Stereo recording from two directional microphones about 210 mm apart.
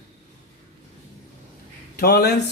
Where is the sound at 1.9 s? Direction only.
50° left (ahead or behind).